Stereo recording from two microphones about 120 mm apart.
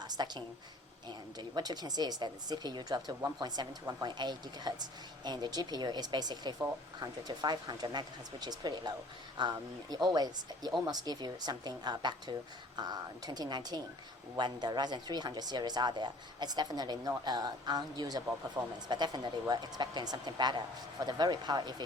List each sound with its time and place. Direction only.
0.0 s speech: 35° right (ahead or behind)